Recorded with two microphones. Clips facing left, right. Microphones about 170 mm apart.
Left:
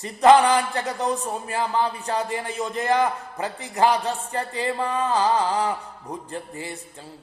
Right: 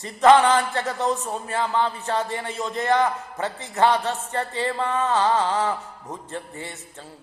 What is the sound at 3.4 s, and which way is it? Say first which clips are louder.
Speech: even; 35° left (ahead or behind).